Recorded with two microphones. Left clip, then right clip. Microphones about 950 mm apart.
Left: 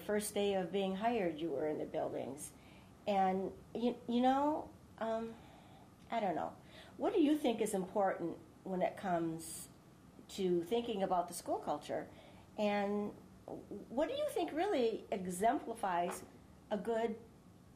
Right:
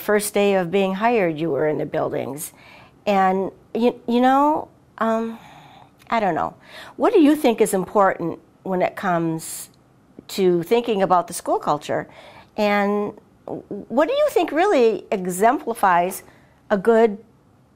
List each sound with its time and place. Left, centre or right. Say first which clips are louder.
0.0 s a woman's voice: right 18 dB; right